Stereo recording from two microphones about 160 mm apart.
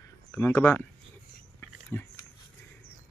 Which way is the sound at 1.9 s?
15° left (ahead or behind).